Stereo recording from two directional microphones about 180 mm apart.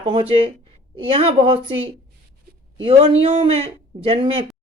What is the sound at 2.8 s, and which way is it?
Speech, 30° right (ahead or behind).